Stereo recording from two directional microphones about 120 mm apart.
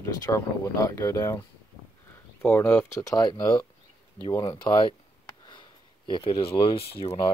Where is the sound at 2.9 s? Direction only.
30° left (ahead or behind).